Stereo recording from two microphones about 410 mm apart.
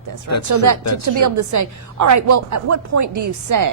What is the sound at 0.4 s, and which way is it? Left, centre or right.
Speech, right.